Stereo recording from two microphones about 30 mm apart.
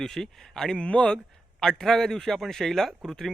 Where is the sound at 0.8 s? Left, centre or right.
Left.